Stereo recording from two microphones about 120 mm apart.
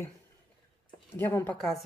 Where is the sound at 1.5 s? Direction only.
5° left (ahead or behind).